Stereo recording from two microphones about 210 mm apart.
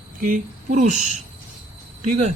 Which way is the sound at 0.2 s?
40° right (ahead or behind).